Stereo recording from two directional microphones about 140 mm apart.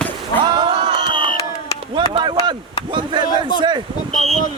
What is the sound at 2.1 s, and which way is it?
Speech, 35° right (ahead or behind).